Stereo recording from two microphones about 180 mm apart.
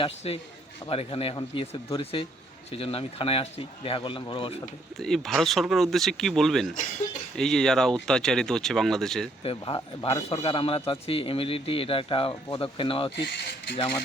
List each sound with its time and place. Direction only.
0.2 s a man's voice: 30° left (ahead or behind)
4.9 s speech: centre (ahead or behind)
9.4 s a man's voice: 30° left (ahead or behind)
13.2 s speech: 65° left (ahead or behind)